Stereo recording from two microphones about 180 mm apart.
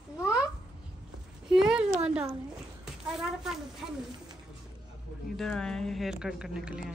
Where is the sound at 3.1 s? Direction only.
Centre (ahead or behind).